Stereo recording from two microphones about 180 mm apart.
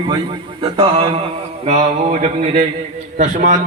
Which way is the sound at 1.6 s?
45° right (ahead or behind).